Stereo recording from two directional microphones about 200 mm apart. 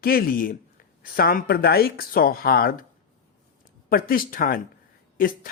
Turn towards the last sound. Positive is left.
turn(degrees=45)  # may be behind; listen again after turning